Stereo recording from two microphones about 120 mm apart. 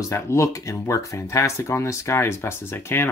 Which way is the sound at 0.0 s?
25° left (ahead or behind).